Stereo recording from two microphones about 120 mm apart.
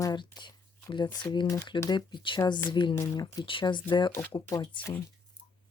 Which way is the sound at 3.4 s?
45° left (ahead or behind).